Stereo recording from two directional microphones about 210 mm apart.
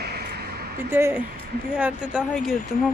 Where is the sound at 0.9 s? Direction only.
10° right (ahead or behind).